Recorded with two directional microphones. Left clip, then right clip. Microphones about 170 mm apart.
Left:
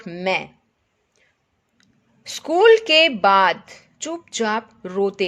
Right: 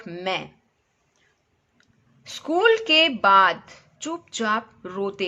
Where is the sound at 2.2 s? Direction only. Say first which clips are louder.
Left 6 dB; 35° left (ahead or behind).